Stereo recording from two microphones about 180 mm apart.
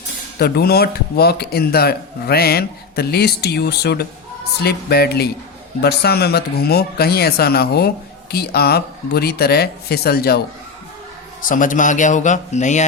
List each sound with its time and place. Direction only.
0.3 s speech: 60° left (ahead or behind)
11.4 s a man's voice: 45° left (ahead or behind)